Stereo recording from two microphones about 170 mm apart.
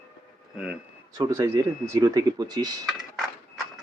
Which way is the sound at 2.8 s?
Centre (ahead or behind).